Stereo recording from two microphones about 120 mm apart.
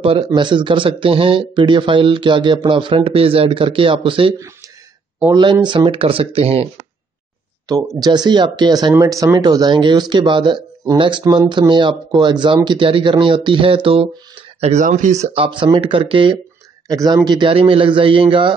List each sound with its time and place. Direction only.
0.0 s speech: 45° right (ahead or behind)
5.3 s speech: 40° right (ahead or behind); by 6.7 s 55° right (ahead or behind)
8.0 s speech: 35° right (ahead or behind)
14.6 s speech: 80° right
15.3 s speech: 45° right (ahead or behind)
16.9 s speech: 30° right (ahead or behind)